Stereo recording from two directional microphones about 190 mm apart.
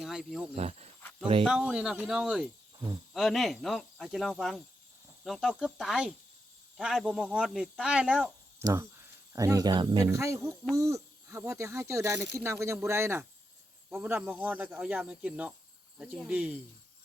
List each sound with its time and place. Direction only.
0.0 s cricket: centre (ahead or behind)
0.5 s speech: 35° right (ahead or behind)
1.5 s speech: 5° right (ahead or behind)